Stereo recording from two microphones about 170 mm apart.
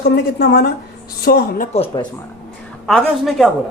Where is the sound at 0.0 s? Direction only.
70° left (ahead or behind).